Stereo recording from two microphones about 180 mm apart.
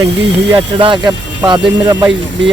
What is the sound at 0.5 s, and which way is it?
Speech, 25° right (ahead or behind).